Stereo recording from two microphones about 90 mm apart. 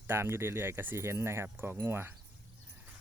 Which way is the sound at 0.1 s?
25° right (ahead or behind).